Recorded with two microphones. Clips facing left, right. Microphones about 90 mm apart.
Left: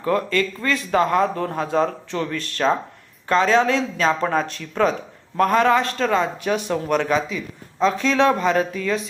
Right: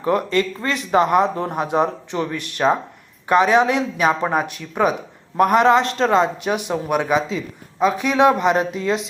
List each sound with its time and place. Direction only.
0.0 s speech: 20° right (ahead or behind)